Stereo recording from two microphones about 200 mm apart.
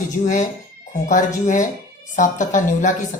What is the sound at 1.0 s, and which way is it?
Speech, 40° left (ahead or behind).